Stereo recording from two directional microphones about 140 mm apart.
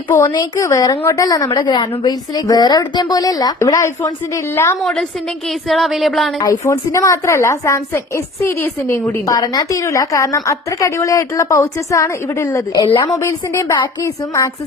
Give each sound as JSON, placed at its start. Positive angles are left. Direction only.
{"t": 0.3, "sound": "a woman's voice", "side_deg": 25}
{"t": 4.8, "sound": "speech", "side_deg": 0}
{"t": 6.4, "sound": "a woman's voice", "side_deg": 25}
{"t": 12.7, "sound": "a woman's voice", "side_deg": 30}